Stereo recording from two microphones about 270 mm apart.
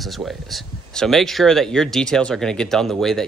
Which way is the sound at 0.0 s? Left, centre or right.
Centre.